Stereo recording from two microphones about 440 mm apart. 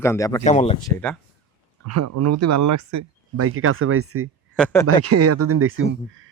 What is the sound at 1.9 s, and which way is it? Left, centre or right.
Speech, right.